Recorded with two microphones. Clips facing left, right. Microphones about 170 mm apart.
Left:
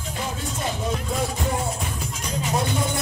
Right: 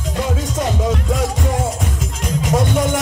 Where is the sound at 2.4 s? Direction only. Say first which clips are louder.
Right 7 dB; 90° right.